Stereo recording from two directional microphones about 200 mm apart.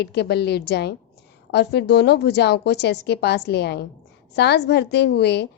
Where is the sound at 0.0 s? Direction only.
55° left (ahead or behind).